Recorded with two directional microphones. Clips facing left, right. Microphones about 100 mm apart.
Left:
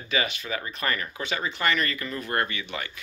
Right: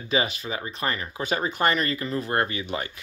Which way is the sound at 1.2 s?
40° right (ahead or behind).